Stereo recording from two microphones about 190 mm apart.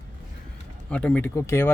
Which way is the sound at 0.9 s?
5° left (ahead or behind).